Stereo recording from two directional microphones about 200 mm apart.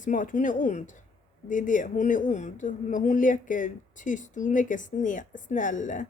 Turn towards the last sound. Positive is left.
turn(degrees=40)  # may be behind; listen again after turning